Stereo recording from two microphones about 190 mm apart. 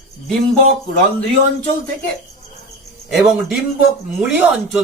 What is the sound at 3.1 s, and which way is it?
Speech, 5° right (ahead or behind).